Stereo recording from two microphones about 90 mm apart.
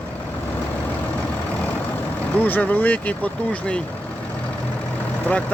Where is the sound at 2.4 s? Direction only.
20° left (ahead or behind).